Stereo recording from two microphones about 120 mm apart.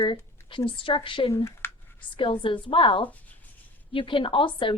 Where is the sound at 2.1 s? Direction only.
45° left (ahead or behind).